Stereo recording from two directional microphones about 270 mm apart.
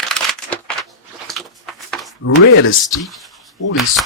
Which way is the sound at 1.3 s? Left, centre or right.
Centre.